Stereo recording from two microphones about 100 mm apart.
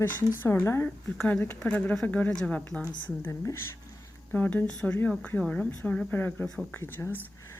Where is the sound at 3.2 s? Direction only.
25° left (ahead or behind).